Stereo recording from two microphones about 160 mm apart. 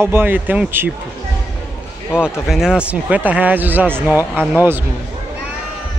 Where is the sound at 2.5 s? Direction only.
5° right (ahead or behind).